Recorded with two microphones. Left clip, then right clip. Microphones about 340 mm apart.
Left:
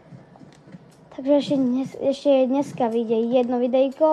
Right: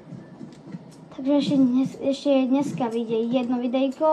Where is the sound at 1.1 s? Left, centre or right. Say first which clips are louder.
Left 2 dB; left.